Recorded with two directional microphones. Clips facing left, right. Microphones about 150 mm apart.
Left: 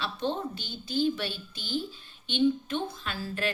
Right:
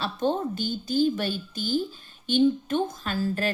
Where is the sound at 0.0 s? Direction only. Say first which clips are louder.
Right 5 dB; 45° right (ahead or behind).